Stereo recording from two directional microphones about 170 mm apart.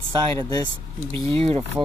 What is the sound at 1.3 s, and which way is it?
Speech, 35° right (ahead or behind).